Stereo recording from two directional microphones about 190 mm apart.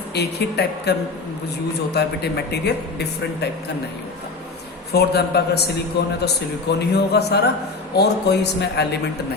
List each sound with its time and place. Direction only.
0.1 s speech: 60° left (ahead or behind)
4.9 s speech: 60° left (ahead or behind)